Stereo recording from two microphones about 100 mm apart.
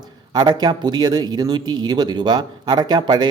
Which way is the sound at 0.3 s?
45° right (ahead or behind).